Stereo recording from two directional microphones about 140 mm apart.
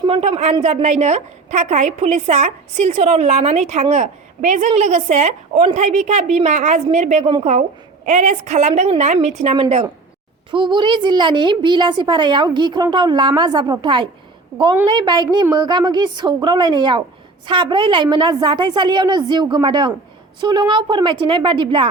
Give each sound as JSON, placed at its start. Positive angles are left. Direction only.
{"t": 0.1, "sound": "a woman's voice", "side_deg": -45}
{"t": 9.6, "sound": "a woman's voice", "side_deg": -40}